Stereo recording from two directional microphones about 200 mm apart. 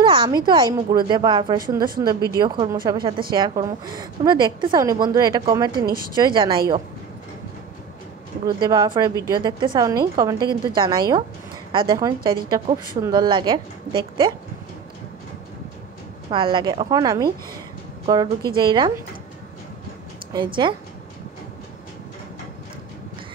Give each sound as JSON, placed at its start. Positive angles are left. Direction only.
{"t": 0.0, "sound": "a woman's voice", "side_deg": -25}
{"t": 8.5, "sound": "a woman's voice", "side_deg": -20}
{"t": 16.3, "sound": "a woman's voice", "side_deg": -25}
{"t": 20.3, "sound": "a woman's voice", "side_deg": -25}